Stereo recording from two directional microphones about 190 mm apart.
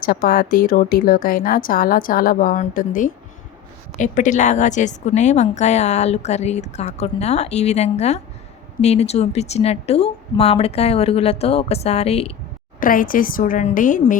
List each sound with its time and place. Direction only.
0.0 s a woman's voice: 50° left (ahead or behind); by 12.3 s 30° left (ahead or behind)
12.8 s speech: 45° left (ahead or behind)